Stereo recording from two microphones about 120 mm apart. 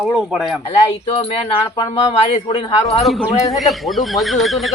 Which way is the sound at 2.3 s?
60° left (ahead or behind).